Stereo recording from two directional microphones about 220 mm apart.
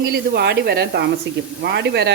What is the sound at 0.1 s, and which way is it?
Speech, 50° right (ahead or behind).